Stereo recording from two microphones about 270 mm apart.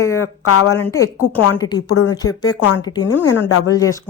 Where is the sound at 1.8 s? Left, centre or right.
Left.